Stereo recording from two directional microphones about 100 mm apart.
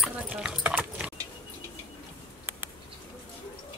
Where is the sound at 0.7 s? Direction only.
15° right (ahead or behind).